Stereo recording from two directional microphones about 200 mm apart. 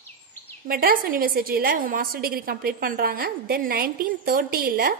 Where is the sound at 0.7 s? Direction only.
45° right (ahead or behind).